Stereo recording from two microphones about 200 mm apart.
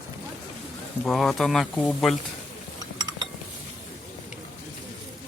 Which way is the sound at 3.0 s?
20° right (ahead or behind).